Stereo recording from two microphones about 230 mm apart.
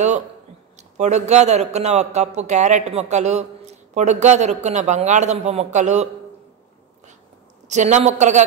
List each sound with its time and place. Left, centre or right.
0.7 s a man's voice: right
7.6 s a woman's voice: right